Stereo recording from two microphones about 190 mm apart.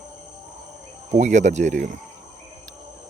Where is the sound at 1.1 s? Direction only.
40° right (ahead or behind).